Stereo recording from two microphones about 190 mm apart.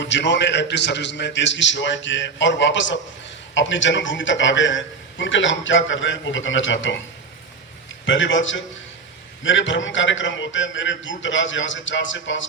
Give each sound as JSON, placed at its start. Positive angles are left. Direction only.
{"t": 0.0, "sound": "a man's voice", "side_deg": 70}
{"t": 8.0, "sound": "a man's voice", "side_deg": 80}